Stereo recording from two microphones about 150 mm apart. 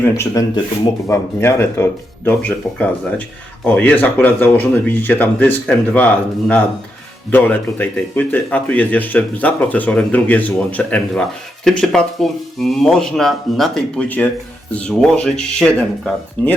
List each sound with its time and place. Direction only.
0.0 s speech: 20° left (ahead or behind)
7.3 s speech: 15° left (ahead or behind)